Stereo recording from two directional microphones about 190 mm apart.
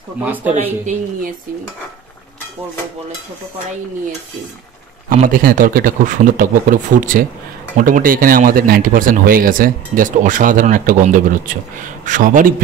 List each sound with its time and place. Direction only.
0.2 s speech: 10° right (ahead or behind)
0.7 s speech: 40° right (ahead or behind)
5.1 s speech: 45° right (ahead or behind)